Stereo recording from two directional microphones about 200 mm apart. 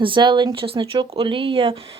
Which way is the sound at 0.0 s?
25° right (ahead or behind).